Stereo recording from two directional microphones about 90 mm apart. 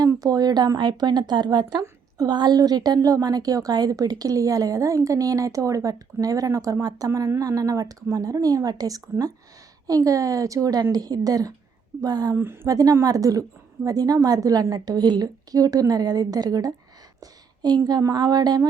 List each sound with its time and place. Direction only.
0.0 s a woman's voice: 45° right (ahead or behind)
1.8 s a sound: 35° right (ahead or behind)
2.3 s a woman's voice: 50° right (ahead or behind)
12.3 s a woman's voice: 25° right (ahead or behind)
12.6 s a woman's voice: 40° right (ahead or behind)